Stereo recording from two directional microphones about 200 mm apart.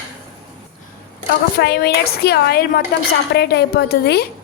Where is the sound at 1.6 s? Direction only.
55° left (ahead or behind).